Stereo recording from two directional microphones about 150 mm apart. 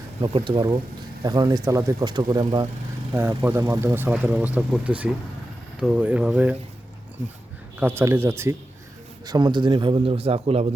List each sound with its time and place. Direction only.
0.2 s a man's voice: 35° right (ahead or behind)
3.1 s speech: 15° right (ahead or behind)
7.8 s speech: 15° right (ahead or behind)
9.2 s a man's voice: 30° right (ahead or behind)